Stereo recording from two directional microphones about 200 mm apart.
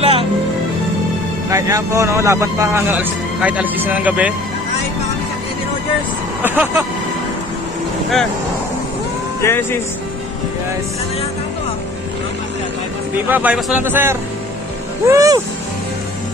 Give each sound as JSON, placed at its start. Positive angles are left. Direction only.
{"t": 0.0, "sound": "music", "side_deg": -30}
{"t": 1.5, "sound": "speech", "side_deg": -15}
{"t": 6.4, "sound": "speech", "side_deg": -10}
{"t": 9.4, "sound": "speech", "side_deg": 10}
{"t": 13.3, "sound": "speech", "side_deg": -10}